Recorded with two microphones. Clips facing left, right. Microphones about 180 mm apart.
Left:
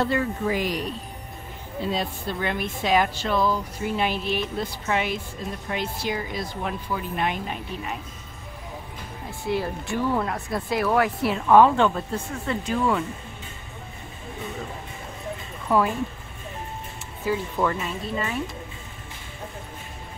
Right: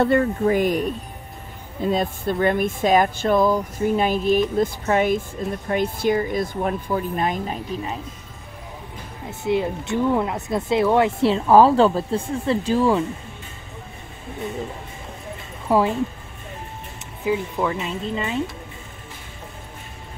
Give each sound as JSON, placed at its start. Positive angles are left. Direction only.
{"t": 0.0, "sound": "speech", "side_deg": -55}
{"t": 9.3, "sound": "speech", "side_deg": -20}
{"t": 15.7, "sound": "speech", "side_deg": -25}
{"t": 17.2, "sound": "speech", "side_deg": -10}